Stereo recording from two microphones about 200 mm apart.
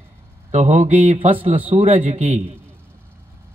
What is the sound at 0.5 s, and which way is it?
A man's voice, 35° right (ahead or behind).